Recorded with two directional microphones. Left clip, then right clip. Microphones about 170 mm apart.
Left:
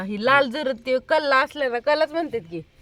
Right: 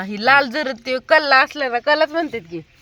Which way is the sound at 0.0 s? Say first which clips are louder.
Right 4 dB; 20° right (ahead or behind).